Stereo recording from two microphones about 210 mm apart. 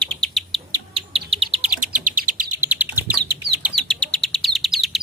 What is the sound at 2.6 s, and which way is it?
Bird, 10° right (ahead or behind).